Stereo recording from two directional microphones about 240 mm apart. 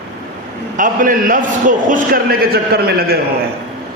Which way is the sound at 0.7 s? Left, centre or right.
Right.